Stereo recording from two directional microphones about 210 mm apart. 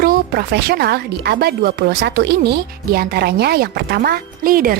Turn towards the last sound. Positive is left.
turn(degrees=-40)  # may be behind; listen again after turning